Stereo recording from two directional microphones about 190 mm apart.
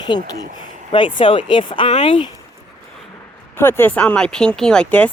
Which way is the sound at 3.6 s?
10° left (ahead or behind).